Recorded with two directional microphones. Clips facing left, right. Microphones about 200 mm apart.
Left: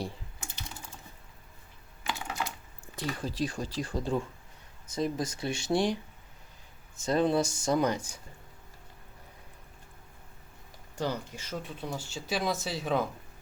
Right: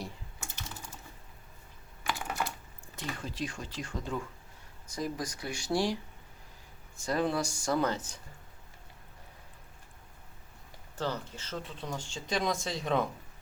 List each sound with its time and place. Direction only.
2.0 s typing: 20° left (ahead or behind)
2.9 s speech: 35° left (ahead or behind)
7.0 s speech: 20° left (ahead or behind)
10.9 s speech: 15° left (ahead or behind)